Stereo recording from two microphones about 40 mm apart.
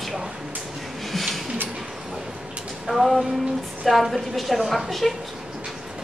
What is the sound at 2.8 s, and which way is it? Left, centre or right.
A man's voice, centre.